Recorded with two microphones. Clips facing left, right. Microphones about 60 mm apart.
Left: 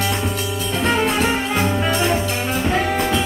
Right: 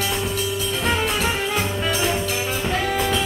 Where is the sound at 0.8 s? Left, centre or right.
Centre.